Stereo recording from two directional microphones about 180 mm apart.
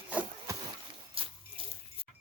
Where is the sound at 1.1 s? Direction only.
30° right (ahead or behind).